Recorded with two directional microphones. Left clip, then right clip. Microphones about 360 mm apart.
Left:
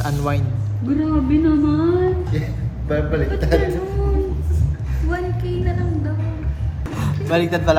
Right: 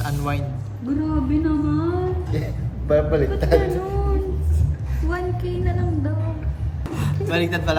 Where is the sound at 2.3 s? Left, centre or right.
Right.